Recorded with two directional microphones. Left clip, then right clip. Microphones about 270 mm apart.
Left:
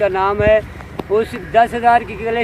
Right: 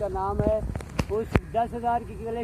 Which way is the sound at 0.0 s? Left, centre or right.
Left.